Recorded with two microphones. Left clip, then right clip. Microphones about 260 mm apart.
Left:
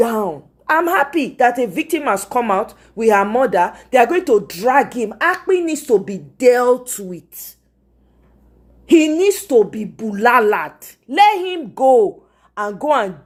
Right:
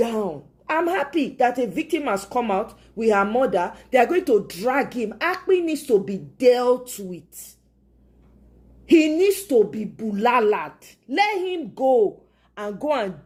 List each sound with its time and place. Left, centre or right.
0.0 s a sound: centre
0.8 s a woman's voice: centre
8.9 s a woman's voice: centre